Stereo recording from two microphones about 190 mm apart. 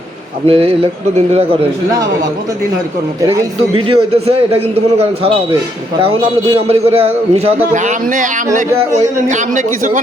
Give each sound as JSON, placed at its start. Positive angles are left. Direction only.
{"t": 0.4, "sound": "a man's voice", "side_deg": -30}
{"t": 3.2, "sound": "a man's voice", "side_deg": -20}
{"t": 8.9, "sound": "a man's voice", "side_deg": -15}
{"t": 9.3, "sound": "a man's voice", "side_deg": -40}